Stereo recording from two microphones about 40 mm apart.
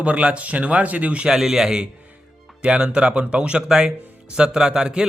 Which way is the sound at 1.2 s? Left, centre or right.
Centre.